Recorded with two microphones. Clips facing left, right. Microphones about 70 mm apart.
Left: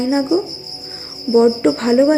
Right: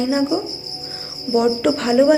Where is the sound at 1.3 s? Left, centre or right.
Left.